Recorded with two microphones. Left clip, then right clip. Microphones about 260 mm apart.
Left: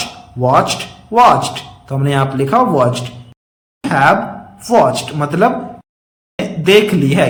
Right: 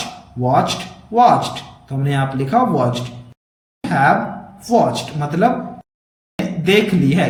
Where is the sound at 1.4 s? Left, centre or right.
Centre.